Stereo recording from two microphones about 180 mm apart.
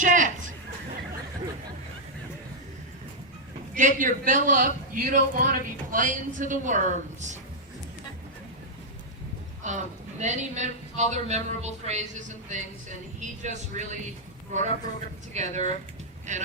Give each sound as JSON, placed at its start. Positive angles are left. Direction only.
{"t": 0.0, "sound": "a sound", "side_deg": -45}
{"t": 3.8, "sound": "a man's voice", "side_deg": -45}
{"t": 9.6, "sound": "a man's voice", "side_deg": -40}
{"t": 15.3, "sound": "a man's voice", "side_deg": -40}